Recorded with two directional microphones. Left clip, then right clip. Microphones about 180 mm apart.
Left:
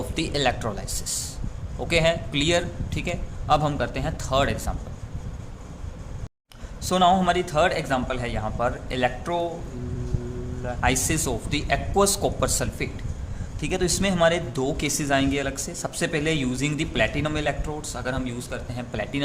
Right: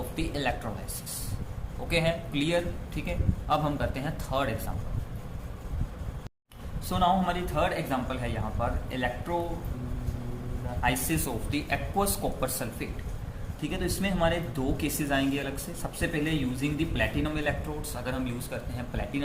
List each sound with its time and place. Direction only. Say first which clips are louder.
0.2 s speech: left 7 dB; 55° left (ahead or behind)
1.9 s speech: left 6 dB; 50° left (ahead or behind)
6.9 s speech: left 7 dB; 55° left (ahead or behind)
10.8 s speech: left 4 dB; 50° left (ahead or behind)